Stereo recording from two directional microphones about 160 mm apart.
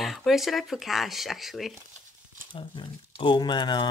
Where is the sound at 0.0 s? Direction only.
Centre (ahead or behind).